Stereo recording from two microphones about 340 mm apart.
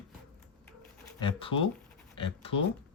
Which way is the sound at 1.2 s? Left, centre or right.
Centre.